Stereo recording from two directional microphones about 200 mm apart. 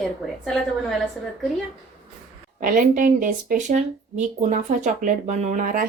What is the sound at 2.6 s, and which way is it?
Speech, 40° right (ahead or behind).